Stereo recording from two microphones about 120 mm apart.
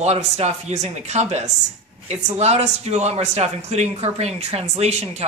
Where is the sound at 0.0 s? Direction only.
65° right (ahead or behind).